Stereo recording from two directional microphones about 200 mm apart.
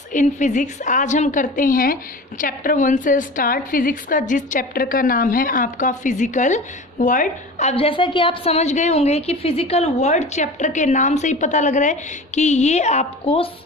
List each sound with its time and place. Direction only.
0.1 s a woman's voice: 40° left (ahead or behind)